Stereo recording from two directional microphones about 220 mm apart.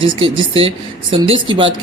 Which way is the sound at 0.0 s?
25° right (ahead or behind).